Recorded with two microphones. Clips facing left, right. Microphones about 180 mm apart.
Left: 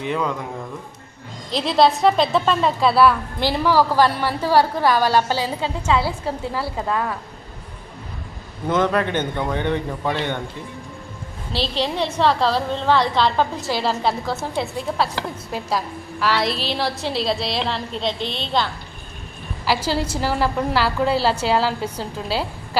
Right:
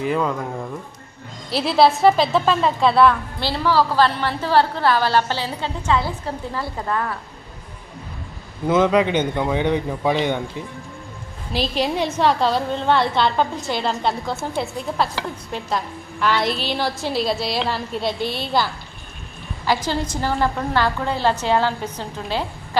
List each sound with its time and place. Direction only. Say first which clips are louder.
0.0 s a woman's voice: right 2 dB; centre (ahead or behind)
1.5 s a woman's voice: right 1 dB; 5° right (ahead or behind)
3.4 s a woman's voice: left 1 dB; 15° left (ahead or behind)
8.6 s a man's voice: right 3 dB; 10° right (ahead or behind)
11.5 s a man's voice: right 2 dB; 10° right (ahead or behind)
16.2 s a woman's voice: right 1 dB; centre (ahead or behind)
18.2 s a woman's voice: right 2 dB; 25° left (ahead or behind)
20.1 s a woman's voice: even; 5° left (ahead or behind)